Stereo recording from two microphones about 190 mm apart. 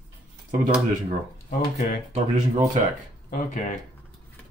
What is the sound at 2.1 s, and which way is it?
Speech, 40° right (ahead or behind).